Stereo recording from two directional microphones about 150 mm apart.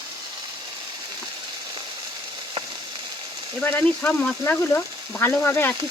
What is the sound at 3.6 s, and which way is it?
Speech, 10° left (ahead or behind).